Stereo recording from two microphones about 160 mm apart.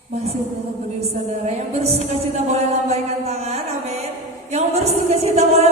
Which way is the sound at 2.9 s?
40° right (ahead or behind).